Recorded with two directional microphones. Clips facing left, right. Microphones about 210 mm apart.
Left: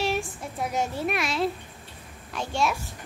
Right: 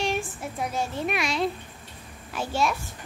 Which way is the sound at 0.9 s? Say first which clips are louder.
Even; centre (ahead or behind).